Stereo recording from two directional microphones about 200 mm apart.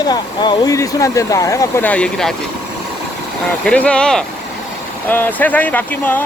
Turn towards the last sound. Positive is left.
turn(degrees=10)  # may be behind; listen again after turning